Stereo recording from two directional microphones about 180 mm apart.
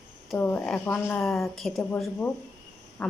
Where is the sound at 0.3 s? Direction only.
10° left (ahead or behind).